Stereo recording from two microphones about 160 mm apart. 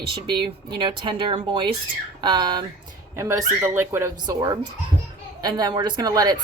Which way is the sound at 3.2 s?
15° right (ahead or behind).